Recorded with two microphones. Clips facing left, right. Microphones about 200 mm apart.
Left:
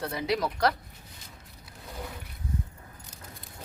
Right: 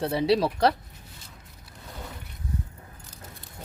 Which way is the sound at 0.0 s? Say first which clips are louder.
Right 6 dB; 30° right (ahead or behind).